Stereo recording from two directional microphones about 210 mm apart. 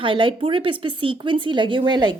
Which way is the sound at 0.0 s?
25° right (ahead or behind).